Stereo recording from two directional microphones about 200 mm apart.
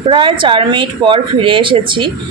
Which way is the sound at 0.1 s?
25° right (ahead or behind).